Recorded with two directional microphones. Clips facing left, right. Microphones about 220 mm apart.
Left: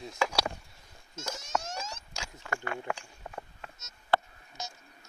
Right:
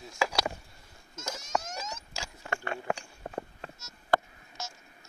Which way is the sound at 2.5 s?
30° right (ahead or behind).